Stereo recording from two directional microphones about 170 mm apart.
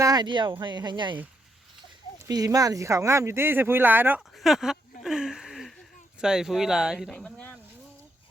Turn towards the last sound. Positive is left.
turn(degrees=10)  # may be behind; listen again after turning